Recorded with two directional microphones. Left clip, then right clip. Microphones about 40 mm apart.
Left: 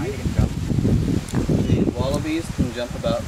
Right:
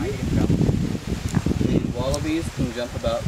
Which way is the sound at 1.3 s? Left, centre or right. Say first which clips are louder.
Right 2 dB; centre.